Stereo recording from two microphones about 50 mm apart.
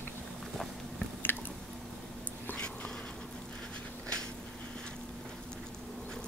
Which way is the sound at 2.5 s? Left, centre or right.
Left.